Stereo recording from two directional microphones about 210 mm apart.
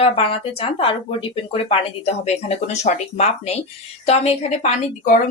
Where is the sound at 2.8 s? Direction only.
35° left (ahead or behind).